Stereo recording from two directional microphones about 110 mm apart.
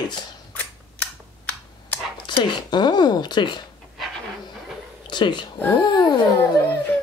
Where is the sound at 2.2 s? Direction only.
45° left (ahead or behind).